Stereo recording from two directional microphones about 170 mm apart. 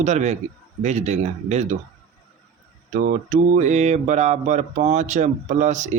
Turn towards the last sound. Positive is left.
turn(degrees=-45)  # may be behind; listen again after turning